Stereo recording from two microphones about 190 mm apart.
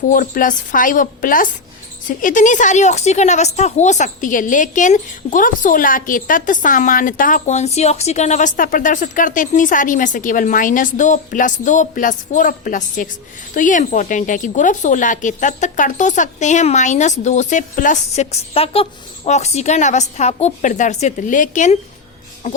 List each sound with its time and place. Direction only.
0.1 s a woman's voice: 45° left (ahead or behind)